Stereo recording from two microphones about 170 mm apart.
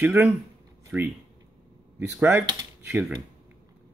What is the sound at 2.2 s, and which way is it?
Speech, 20° right (ahead or behind).